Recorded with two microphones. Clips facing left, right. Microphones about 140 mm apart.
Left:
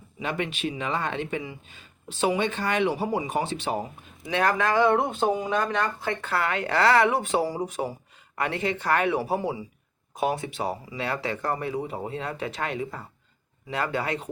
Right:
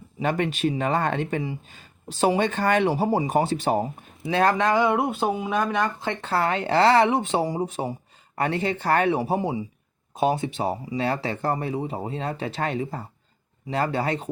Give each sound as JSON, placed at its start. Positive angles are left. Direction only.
{"t": 0.2, "sound": "speech", "side_deg": -45}